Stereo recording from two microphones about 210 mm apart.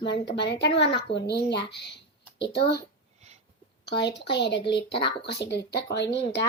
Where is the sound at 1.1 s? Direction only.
55° left (ahead or behind).